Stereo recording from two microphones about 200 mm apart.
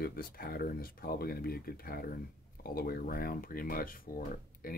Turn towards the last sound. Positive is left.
turn(degrees=45)  # may be behind; listen again after turning